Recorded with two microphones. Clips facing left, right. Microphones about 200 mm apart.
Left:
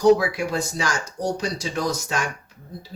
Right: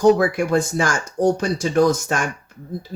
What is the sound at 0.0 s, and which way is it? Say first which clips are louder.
Speech: right 2 dB; 50° right (ahead or behind).